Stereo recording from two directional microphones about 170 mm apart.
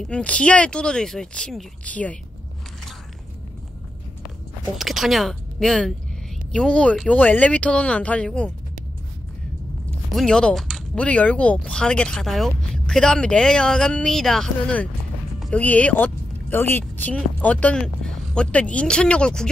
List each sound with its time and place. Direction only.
0.0 s speech: 5° left (ahead or behind)
4.7 s speech: centre (ahead or behind)
9.8 s speech: 5° left (ahead or behind)